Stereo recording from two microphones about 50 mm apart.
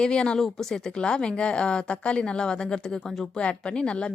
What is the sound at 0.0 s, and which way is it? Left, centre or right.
Speech, centre.